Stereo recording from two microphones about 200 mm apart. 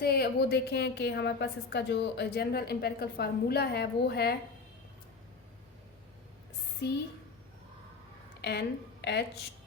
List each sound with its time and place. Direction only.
0.0 s a woman's voice: 50° left (ahead or behind)
8.4 s a woman's voice: 55° left (ahead or behind)